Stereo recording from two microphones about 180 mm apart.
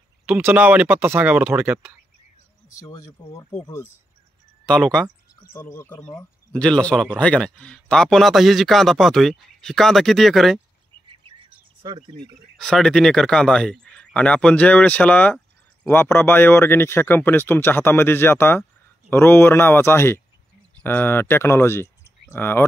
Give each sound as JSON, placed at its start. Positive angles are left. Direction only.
{"t": 0.3, "sound": "speech", "side_deg": -10}
{"t": 2.8, "sound": "speech", "side_deg": 20}
{"t": 4.6, "sound": "speech", "side_deg": 5}
{"t": 5.3, "sound": "speech", "side_deg": 15}
{"t": 11.1, "sound": "chirp", "side_deg": -30}
{"t": 12.5, "sound": "speech", "side_deg": 5}